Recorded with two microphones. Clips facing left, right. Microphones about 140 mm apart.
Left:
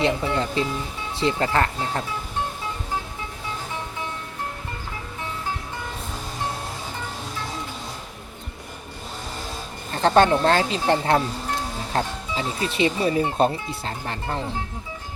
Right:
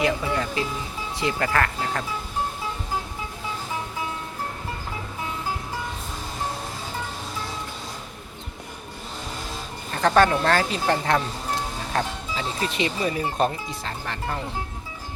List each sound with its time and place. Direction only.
0.0 s speech: 25° left (ahead or behind)
9.9 s speech: 30° left (ahead or behind)